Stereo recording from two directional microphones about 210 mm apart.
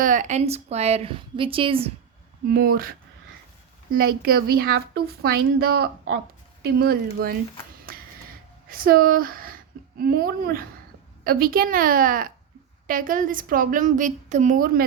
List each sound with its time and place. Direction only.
0.0 s a woman's voice: 35° right (ahead or behind)
2.5 s speech: 45° right (ahead or behind)
3.9 s speech: 45° right (ahead or behind)
7.9 s a sound: 45° right (ahead or behind)
8.7 s a woman's voice: 45° right (ahead or behind)